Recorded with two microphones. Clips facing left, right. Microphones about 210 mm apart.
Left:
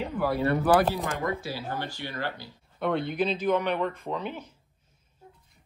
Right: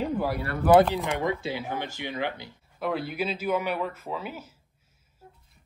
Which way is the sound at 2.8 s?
5° right (ahead or behind).